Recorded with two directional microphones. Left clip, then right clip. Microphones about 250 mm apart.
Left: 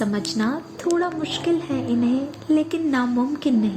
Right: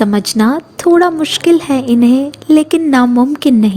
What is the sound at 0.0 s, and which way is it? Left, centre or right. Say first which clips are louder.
Speech: right 11 dB; right.